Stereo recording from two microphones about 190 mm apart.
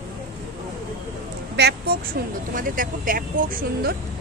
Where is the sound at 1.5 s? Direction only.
60° right (ahead or behind).